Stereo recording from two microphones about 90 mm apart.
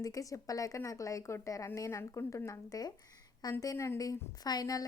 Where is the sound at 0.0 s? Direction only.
40° left (ahead or behind).